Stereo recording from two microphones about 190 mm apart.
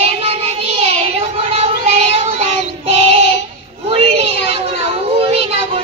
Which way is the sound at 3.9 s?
30° right (ahead or behind).